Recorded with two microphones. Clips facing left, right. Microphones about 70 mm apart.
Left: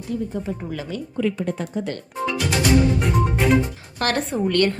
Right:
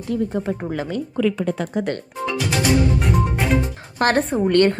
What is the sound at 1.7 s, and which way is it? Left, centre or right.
Speech, right.